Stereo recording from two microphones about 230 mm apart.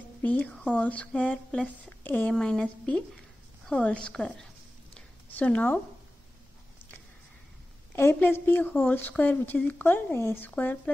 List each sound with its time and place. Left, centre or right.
0.2 s speech: centre
4.9 s a sound: centre
7.9 s a woman's voice: centre